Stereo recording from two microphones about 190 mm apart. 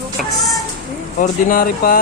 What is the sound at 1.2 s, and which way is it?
Speech, 45° left (ahead or behind).